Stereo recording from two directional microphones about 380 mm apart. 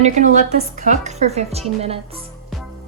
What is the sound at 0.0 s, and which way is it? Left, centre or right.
A woman's voice, centre.